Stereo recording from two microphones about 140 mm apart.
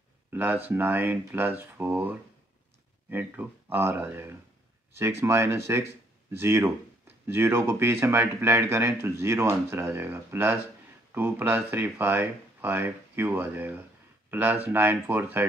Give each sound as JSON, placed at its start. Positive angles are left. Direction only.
{"t": 0.3, "sound": "speech", "side_deg": -15}